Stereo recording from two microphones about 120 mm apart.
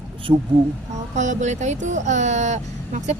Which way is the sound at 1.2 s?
85° right.